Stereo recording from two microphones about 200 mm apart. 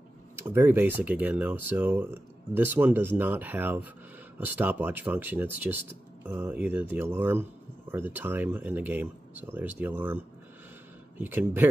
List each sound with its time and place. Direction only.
0.4 s speech: 10° right (ahead or behind)